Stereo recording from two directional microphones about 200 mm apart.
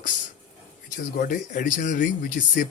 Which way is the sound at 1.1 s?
45° left (ahead or behind).